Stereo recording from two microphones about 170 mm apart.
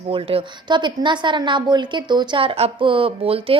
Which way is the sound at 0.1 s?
30° right (ahead or behind).